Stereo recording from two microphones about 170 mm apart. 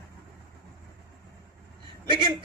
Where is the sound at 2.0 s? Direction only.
25° right (ahead or behind).